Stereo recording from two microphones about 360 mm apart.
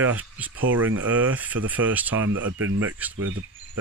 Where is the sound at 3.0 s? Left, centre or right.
Centre.